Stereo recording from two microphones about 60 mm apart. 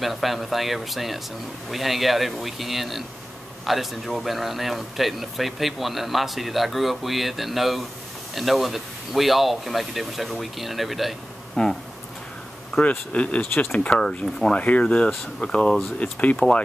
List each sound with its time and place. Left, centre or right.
0.0 s speech: centre
11.5 s speech: centre
13.1 s speech: left